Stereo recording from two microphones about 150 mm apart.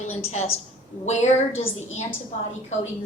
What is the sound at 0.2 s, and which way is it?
A woman's voice, 45° left (ahead or behind).